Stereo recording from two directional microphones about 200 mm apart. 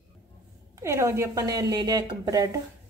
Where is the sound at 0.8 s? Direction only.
15° right (ahead or behind).